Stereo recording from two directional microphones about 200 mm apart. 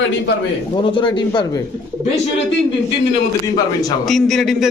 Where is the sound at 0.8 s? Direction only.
25° left (ahead or behind).